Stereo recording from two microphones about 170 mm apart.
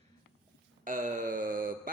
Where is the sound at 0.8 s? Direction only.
50° right (ahead or behind).